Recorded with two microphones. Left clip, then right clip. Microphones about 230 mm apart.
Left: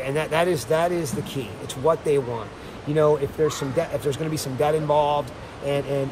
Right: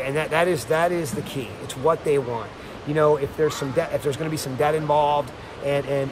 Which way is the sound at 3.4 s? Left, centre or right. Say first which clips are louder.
Right 1 dB; centre.